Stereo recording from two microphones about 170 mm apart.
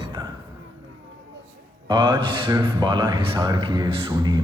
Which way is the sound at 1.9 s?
30° right (ahead or behind).